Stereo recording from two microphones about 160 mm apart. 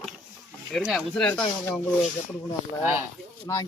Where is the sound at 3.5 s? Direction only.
20° left (ahead or behind).